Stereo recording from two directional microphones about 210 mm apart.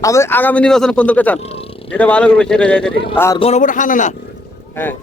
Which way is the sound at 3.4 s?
30° left (ahead or behind).